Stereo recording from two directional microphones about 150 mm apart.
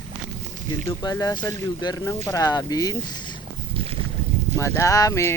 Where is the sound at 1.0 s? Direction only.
25° left (ahead or behind).